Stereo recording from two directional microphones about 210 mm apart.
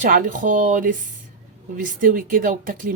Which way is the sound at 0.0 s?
40° right (ahead or behind).